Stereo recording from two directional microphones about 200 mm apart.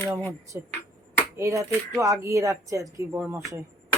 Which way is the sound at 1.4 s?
15° right (ahead or behind).